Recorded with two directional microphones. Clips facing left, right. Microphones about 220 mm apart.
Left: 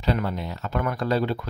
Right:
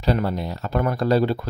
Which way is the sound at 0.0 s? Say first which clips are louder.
Right 3 dB; 35° right (ahead or behind).